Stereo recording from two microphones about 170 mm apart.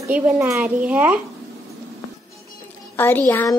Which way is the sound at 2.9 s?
10° left (ahead or behind).